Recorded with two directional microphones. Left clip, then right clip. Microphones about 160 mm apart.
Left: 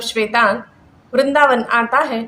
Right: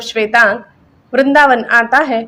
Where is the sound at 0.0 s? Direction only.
40° right (ahead or behind).